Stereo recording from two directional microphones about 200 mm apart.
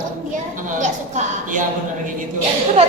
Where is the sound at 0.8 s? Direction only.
40° right (ahead or behind).